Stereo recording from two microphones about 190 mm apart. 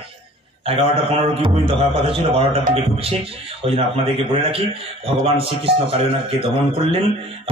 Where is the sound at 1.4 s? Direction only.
30° right (ahead or behind).